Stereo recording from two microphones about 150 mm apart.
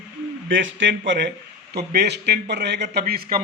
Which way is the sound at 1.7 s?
90° right.